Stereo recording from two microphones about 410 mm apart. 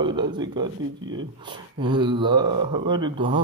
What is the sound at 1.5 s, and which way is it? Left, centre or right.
Speech, centre.